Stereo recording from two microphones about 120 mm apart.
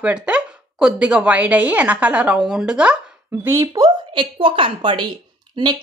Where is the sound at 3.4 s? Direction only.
25° right (ahead or behind).